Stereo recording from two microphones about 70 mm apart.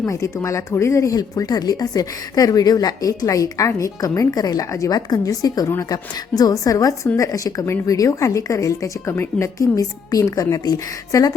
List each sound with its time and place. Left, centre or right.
0.0 s a woman's voice: left
4.4 s a woman's voice: left
5.2 s a woman's voice: left